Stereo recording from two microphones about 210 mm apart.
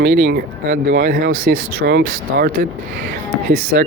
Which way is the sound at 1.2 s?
70° right (ahead or behind).